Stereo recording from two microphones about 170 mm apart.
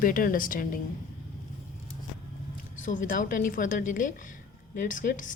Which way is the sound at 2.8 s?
50° left (ahead or behind).